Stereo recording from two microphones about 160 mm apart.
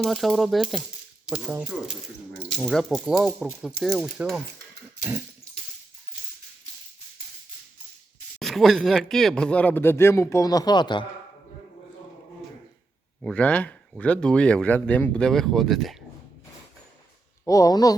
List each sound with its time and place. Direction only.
0.0 s speech: centre (ahead or behind)
8.4 s speech: centre (ahead or behind); by 11.0 s 30° left (ahead or behind)
13.2 s speech: 10° left (ahead or behind)
17.4 s speech: 20° left (ahead or behind)